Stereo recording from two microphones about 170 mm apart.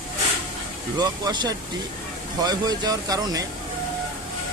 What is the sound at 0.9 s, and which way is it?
Speech, 25° right (ahead or behind).